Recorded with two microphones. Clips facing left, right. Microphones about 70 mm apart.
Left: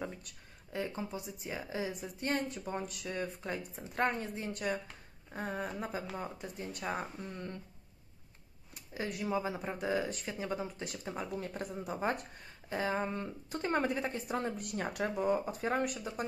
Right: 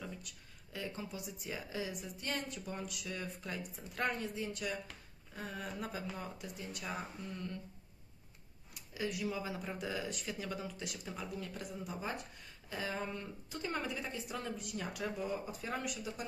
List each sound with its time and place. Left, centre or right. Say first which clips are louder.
0.7 s a woman's voice: left 5 dB; left
8.9 s a woman's voice: left 3 dB; left
12.6 s speech: left 6 dB; left